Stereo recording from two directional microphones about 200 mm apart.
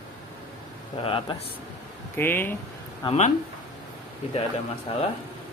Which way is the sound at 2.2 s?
10° left (ahead or behind).